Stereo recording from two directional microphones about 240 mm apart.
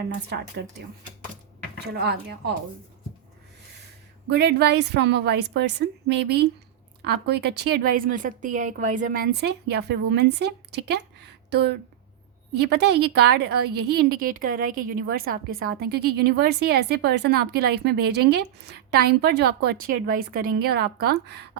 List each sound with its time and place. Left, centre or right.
0.3 s a woman's voice: right
4.3 s a woman's voice: right